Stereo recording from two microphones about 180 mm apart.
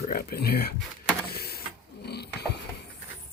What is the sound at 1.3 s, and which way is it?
Mechanisms, 60° left (ahead or behind).